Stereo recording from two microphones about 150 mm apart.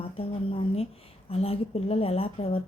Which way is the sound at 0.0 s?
40° left (ahead or behind).